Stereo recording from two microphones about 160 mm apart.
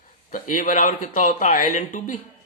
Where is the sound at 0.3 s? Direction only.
60° left (ahead or behind).